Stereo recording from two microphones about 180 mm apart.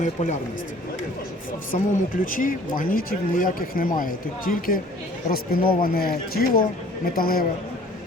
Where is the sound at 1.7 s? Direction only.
50° left (ahead or behind).